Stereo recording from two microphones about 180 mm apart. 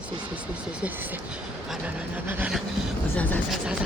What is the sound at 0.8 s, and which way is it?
Speech, 10° right (ahead or behind).